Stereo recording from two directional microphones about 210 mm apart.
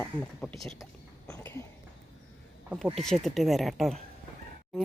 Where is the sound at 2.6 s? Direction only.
5° right (ahead or behind).